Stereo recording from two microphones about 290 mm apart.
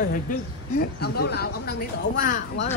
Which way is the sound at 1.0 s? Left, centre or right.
Left.